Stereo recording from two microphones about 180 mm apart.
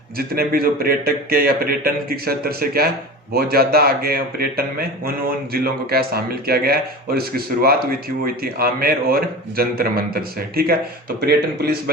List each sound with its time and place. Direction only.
0.2 s a man's voice: 55° right (ahead or behind)